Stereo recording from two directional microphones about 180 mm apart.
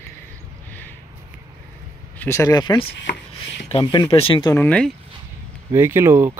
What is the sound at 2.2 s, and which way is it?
Speech, 15° left (ahead or behind).